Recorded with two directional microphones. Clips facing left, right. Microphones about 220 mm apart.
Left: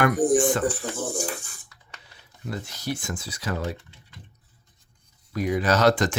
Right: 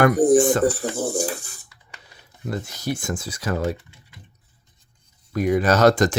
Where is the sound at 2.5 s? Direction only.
45° right (ahead or behind).